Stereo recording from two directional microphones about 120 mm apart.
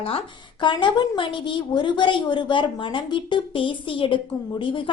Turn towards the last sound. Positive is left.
turn(degrees=45)  # may be behind; listen again after turning